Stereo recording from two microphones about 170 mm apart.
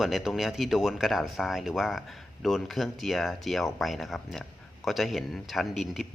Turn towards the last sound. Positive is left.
turn(degrees=0)  # may be behind; listen again after turning